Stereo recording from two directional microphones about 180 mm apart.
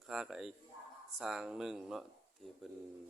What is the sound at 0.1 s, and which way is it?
Speech, 5° right (ahead or behind).